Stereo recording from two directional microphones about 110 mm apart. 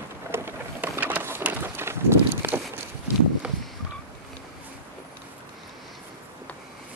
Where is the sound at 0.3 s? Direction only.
20° right (ahead or behind).